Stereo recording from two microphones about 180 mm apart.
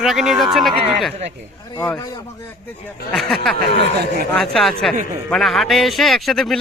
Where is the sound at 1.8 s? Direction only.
15° left (ahead or behind).